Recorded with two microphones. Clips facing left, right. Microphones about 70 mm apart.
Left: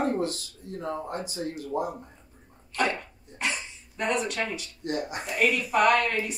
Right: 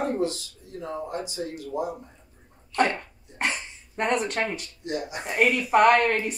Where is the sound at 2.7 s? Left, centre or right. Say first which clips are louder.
Right 4 dB; right.